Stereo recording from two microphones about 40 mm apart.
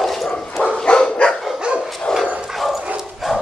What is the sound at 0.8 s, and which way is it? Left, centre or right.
Dog, left.